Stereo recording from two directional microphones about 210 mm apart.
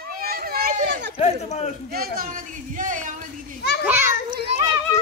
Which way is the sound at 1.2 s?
30° left (ahead or behind).